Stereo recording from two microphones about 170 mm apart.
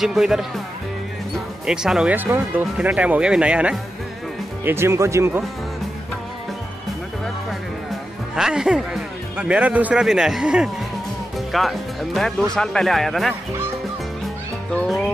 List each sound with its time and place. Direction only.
0.0 s speech: centre (ahead or behind)
1.7 s a man's voice: 5° right (ahead or behind)
8.4 s a man's voice: 5° right (ahead or behind)
14.7 s speech: 5° left (ahead or behind)